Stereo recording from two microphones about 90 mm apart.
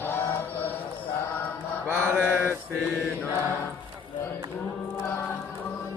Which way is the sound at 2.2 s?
20° left (ahead or behind).